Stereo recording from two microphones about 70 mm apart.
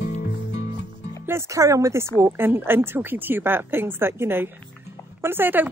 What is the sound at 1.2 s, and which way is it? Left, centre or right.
Speech, right.